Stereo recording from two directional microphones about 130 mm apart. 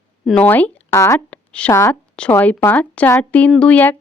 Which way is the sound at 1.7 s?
25° left (ahead or behind).